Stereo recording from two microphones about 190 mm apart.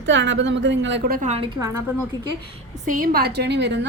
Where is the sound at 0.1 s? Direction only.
70° right (ahead or behind); by 1.3 s 55° right (ahead or behind).